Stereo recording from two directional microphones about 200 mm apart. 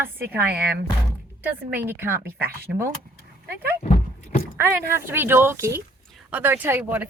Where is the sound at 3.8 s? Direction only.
30° left (ahead or behind).